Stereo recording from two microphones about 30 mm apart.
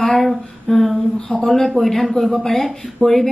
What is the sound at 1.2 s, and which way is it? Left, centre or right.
Speech, left.